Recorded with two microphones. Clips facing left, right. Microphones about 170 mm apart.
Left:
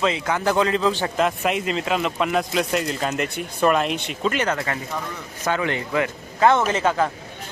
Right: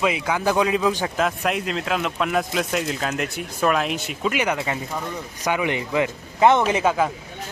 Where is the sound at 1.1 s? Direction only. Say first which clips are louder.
Left 1 dB; centre (ahead or behind).